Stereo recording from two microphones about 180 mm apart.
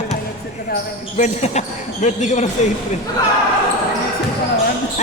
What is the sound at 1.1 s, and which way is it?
Speech, 40° left (ahead or behind).